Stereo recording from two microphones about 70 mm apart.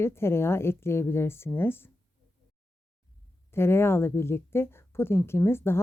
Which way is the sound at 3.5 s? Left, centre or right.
Left.